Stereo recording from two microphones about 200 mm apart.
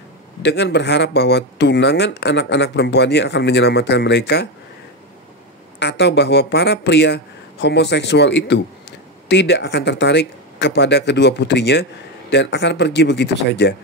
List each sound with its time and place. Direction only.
0.4 s speech: 60° left (ahead or behind)
5.8 s speech: 60° left (ahead or behind)